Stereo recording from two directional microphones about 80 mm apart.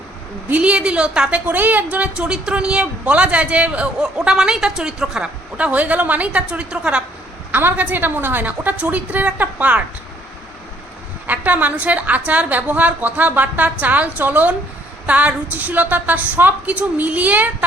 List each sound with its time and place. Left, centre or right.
0.4 s a woman's voice: centre
11.3 s a woman's voice: right